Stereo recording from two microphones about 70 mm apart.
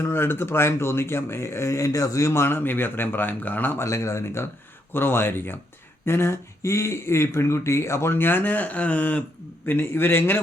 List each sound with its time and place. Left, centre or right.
0.0 s speech: left
3.8 s speech: left
9.6 s speech: left